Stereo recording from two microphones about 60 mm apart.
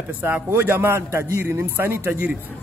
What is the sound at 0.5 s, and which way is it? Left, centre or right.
A man's voice, right.